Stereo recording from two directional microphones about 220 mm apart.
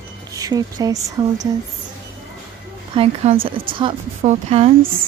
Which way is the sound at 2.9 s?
25° right (ahead or behind).